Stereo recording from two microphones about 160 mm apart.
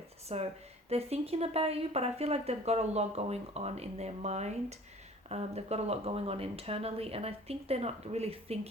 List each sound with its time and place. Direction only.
0.3 s speech: 40° right (ahead or behind)